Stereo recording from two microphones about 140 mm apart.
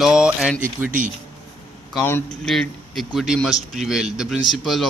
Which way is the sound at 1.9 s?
15° left (ahead or behind).